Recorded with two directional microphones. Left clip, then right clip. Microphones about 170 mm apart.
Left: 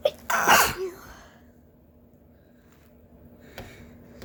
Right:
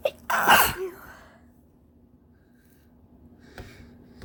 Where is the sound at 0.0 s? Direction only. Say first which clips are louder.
Even; 45° right (ahead or behind).